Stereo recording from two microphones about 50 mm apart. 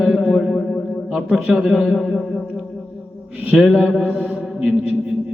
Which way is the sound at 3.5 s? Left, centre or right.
Centre.